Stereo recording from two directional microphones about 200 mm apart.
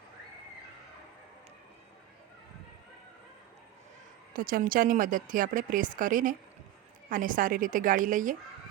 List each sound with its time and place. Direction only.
4.4 s speech: 45° right (ahead or behind)